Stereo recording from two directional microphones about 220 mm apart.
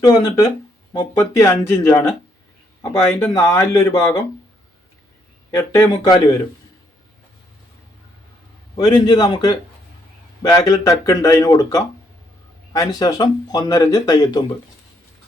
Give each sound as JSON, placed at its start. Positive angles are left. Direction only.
{"t": 0.0, "sound": "speech", "side_deg": 20}
{"t": 3.3, "sound": "speech", "side_deg": 15}
{"t": 5.5, "sound": "speech", "side_deg": 15}
{"t": 8.7, "sound": "a man's voice", "side_deg": 20}